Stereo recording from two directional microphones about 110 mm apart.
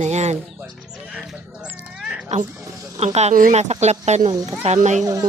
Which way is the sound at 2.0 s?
5° right (ahead or behind).